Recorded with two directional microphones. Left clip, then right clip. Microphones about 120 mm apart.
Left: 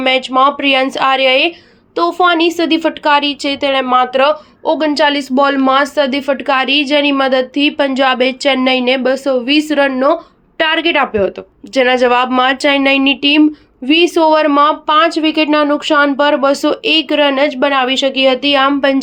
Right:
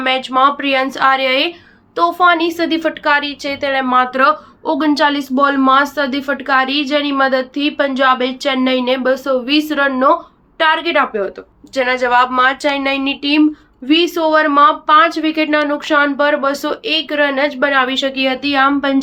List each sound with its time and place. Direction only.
0.0 s a woman's voice: 30° left (ahead or behind)
10.6 s speech: 60° left (ahead or behind)
13.8 s speech: 45° left (ahead or behind)